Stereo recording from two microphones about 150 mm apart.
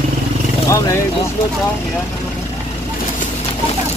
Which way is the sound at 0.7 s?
20° left (ahead or behind).